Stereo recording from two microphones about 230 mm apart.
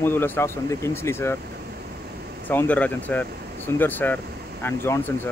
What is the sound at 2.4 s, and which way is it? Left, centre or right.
Speech, centre.